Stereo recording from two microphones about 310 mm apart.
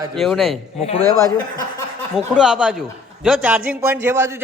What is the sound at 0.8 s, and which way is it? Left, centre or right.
Speech, centre.